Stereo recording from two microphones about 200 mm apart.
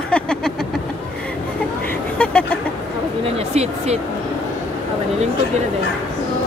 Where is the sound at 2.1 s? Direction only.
5° left (ahead or behind).